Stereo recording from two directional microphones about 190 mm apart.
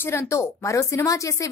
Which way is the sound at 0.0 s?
15° left (ahead or behind).